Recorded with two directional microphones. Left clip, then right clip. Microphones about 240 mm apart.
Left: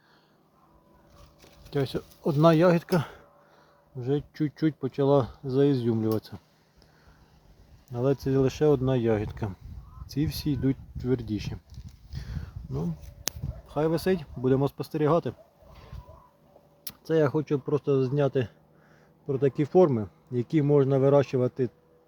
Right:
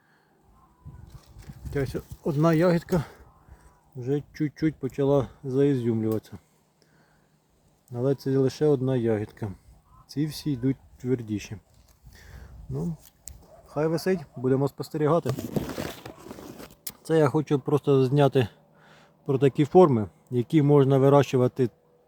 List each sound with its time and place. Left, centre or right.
1.7 s speech: centre
7.9 s speech: centre
12.7 s speech: centre
16.8 s speech: centre